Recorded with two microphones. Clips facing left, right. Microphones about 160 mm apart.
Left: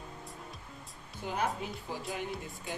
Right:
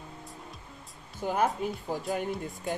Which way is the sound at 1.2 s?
50° right (ahead or behind).